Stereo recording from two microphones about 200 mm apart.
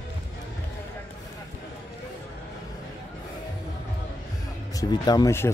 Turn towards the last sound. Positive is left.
turn(degrees=15)  # may be behind; listen again after turning